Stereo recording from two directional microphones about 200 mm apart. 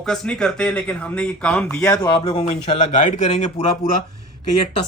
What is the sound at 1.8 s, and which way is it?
Speech, 20° left (ahead or behind).